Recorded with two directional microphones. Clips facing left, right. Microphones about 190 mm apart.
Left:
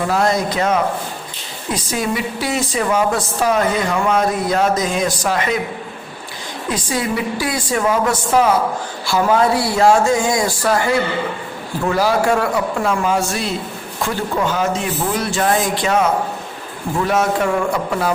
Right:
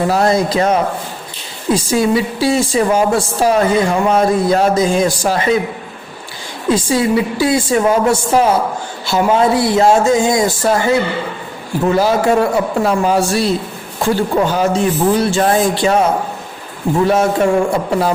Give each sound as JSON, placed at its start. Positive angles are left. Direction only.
{"t": 0.1, "sound": "a woman's voice", "side_deg": -35}
{"t": 6.7, "sound": "a woman's voice", "side_deg": -25}
{"t": 12.8, "sound": "a woman's voice", "side_deg": -35}
{"t": 17.1, "sound": "a woman's voice", "side_deg": -30}